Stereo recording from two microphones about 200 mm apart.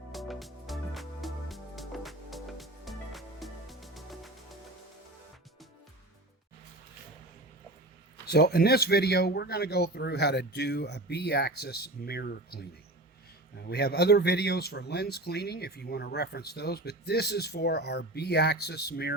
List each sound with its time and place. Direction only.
0.1 s music: centre (ahead or behind)
8.3 s speech: 55° left (ahead or behind)